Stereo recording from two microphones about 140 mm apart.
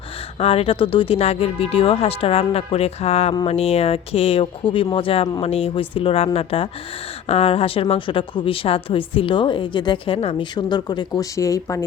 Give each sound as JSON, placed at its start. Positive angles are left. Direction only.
{"t": 0.3, "sound": "a woman's voice", "side_deg": 45}
{"t": 10.7, "sound": "speech", "side_deg": 30}